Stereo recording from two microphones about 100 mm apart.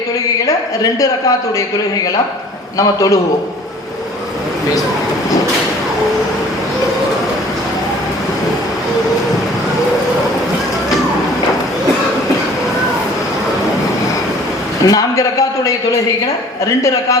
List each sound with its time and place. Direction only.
0.4 s a man's voice: 35° left (ahead or behind)
2.7 s a man's voice: 35° left (ahead or behind)
14.8 s a man's voice: 35° left (ahead or behind)